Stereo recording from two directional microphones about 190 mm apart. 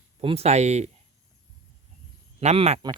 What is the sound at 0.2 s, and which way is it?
Speech, 30° right (ahead or behind).